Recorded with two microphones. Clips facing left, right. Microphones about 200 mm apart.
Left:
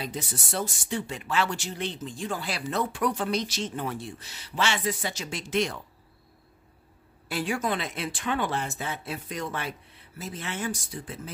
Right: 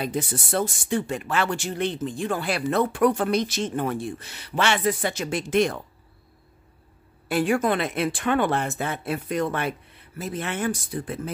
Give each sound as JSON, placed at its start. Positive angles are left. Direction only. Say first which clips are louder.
{"t": 0.0, "sound": "speech", "louder": "right 7 dB", "side_deg": -55}
{"t": 7.2, "sound": "speech", "louder": "right 7 dB", "side_deg": -55}